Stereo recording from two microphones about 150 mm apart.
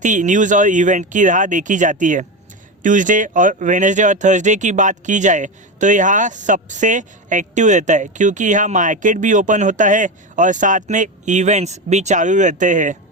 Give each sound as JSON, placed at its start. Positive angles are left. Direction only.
{"t": 0.0, "sound": "speech", "side_deg": -55}